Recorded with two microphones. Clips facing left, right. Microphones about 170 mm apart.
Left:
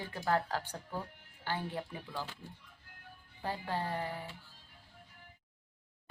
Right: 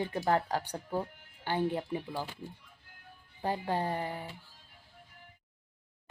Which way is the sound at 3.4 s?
20° right (ahead or behind).